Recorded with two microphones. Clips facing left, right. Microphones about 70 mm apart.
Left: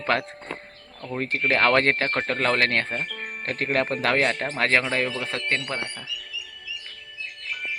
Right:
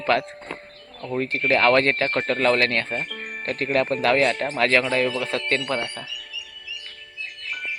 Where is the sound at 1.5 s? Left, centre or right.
Left.